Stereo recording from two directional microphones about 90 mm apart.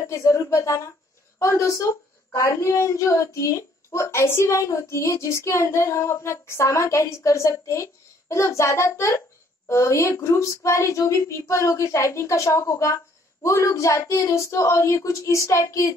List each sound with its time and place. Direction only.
0.0 s a woman's voice: 35° left (ahead or behind)